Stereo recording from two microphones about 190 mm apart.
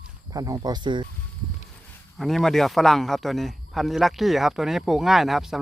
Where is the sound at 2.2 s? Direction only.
Centre (ahead or behind).